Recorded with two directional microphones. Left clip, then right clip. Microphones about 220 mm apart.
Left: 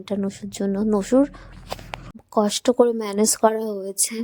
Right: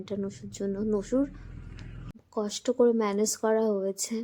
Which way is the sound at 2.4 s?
35° left (ahead or behind).